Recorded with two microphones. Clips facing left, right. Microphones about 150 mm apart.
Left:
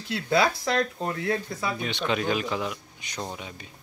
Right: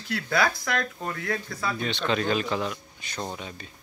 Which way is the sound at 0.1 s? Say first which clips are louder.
Left 2 dB; 25° left (ahead or behind).